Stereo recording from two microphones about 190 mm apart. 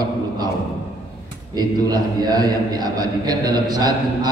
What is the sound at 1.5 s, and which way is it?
A man's voice, 20° right (ahead or behind).